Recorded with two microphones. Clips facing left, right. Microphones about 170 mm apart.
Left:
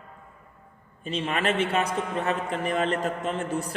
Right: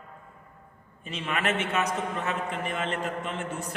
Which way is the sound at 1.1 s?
30° left (ahead or behind).